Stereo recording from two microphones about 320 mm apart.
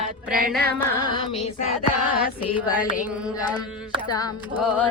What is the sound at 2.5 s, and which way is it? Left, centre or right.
Music, centre.